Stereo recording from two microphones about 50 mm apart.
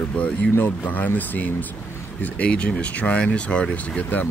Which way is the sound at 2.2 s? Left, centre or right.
Left.